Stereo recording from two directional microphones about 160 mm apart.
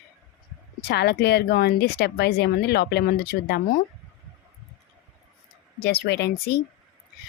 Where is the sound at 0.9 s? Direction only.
90° left.